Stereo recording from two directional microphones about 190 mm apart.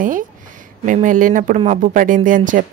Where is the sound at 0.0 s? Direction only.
45° right (ahead or behind).